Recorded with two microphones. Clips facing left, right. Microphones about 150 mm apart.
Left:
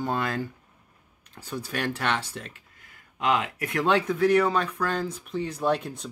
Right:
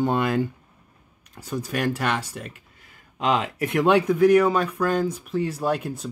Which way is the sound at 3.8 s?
15° right (ahead or behind).